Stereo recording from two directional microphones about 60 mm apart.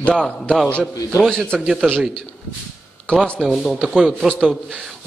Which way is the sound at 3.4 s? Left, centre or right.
Centre.